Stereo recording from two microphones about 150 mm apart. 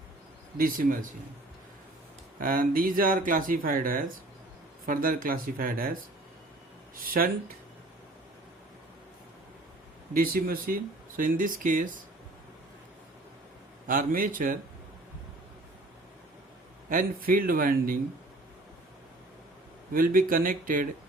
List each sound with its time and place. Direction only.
0.5 s speech: 70° right (ahead or behind)
2.4 s speech: 70° right (ahead or behind)
10.2 s speech: 75° right (ahead or behind)
11.2 s speech: 65° right (ahead or behind)
13.8 s speech: 65° right (ahead or behind)
16.9 s speech: 70° right (ahead or behind)
19.9 s speech: 70° right (ahead or behind)